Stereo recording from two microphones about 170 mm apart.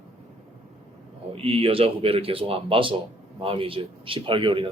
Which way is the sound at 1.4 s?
35° right (ahead or behind).